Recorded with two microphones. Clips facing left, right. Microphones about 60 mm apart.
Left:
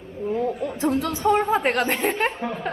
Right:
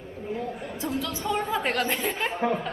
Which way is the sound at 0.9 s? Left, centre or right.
Left.